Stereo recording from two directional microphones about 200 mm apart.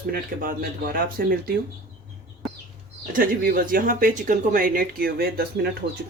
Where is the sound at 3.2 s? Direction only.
45° right (ahead or behind).